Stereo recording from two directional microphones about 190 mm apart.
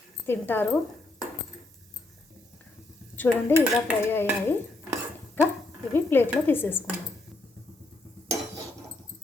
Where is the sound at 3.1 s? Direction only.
10° left (ahead or behind).